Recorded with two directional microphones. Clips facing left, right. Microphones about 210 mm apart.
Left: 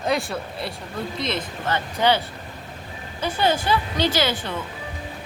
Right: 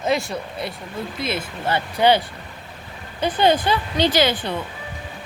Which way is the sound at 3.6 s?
15° right (ahead or behind).